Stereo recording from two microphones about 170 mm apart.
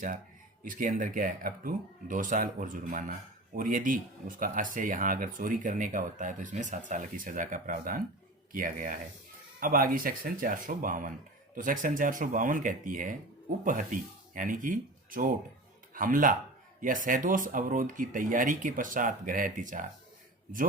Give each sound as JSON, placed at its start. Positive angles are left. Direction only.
{"t": 0.6, "sound": "speech", "side_deg": -50}